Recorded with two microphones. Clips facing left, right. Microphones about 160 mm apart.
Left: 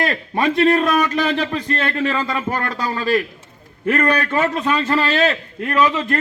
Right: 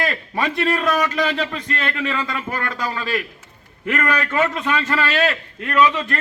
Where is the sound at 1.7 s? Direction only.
30° left (ahead or behind).